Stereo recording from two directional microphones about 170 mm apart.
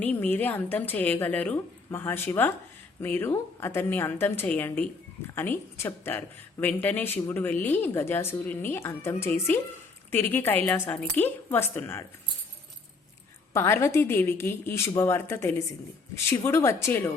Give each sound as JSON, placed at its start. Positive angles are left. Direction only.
{"t": 0.0, "sound": "speech", "side_deg": 10}
{"t": 13.5, "sound": "speech", "side_deg": 15}